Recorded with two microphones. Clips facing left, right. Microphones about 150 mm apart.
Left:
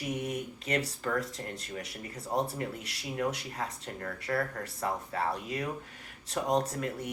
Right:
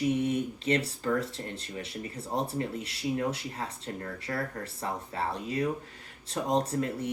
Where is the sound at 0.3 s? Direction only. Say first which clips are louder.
Right 6 dB; 30° right (ahead or behind).